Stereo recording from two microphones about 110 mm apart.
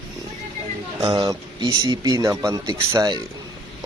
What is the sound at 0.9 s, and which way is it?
Speech, 35° right (ahead or behind).